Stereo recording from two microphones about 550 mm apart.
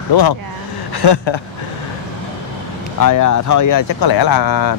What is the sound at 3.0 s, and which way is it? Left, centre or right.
Speech, left.